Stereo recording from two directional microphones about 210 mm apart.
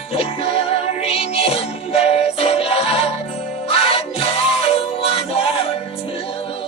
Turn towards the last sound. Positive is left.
turn(degrees=25)  # may be behind; listen again after turning